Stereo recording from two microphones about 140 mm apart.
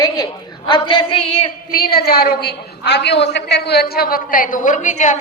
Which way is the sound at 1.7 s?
90° left.